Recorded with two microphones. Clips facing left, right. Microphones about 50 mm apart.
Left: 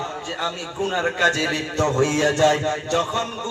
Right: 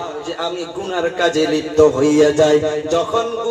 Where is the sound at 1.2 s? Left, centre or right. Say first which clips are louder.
Right 6 dB; left.